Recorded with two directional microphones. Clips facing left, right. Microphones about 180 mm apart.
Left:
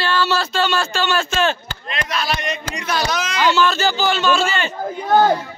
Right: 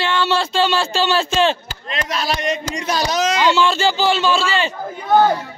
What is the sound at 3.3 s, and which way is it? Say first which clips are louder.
A man's voice: left 1 dB; 25° right (ahead or behind).